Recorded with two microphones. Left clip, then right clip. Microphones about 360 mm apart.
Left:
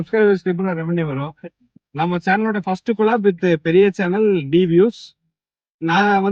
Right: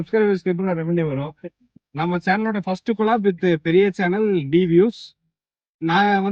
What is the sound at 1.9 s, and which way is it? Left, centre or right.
Speech, centre.